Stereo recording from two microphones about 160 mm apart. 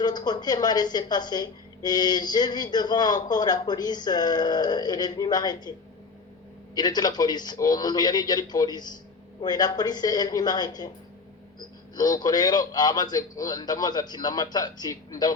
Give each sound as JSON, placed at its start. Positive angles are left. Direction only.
{"t": 0.0, "sound": "a man's voice", "side_deg": 25}
{"t": 6.7, "sound": "a man's voice", "side_deg": 25}
{"t": 11.9, "sound": "a man's voice", "side_deg": 25}